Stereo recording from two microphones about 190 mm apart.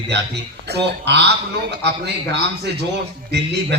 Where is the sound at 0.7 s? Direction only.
60° right (ahead or behind).